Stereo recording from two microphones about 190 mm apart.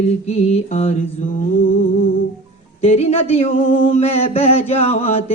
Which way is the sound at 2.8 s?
35° left (ahead or behind).